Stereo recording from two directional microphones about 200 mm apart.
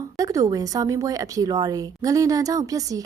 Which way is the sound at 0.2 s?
15° right (ahead or behind).